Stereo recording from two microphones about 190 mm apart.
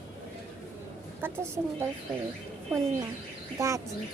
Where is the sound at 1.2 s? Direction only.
10° right (ahead or behind).